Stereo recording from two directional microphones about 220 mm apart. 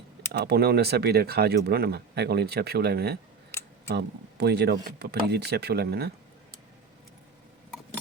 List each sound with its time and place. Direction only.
0.3 s speech: 45° right (ahead or behind)
3.5 s a sound: 10° left (ahead or behind)
3.8 s speech: 50° right (ahead or behind)